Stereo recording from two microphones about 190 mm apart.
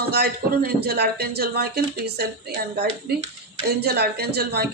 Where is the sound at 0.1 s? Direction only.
55° right (ahead or behind).